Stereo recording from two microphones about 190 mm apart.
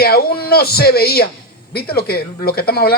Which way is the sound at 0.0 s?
55° left (ahead or behind).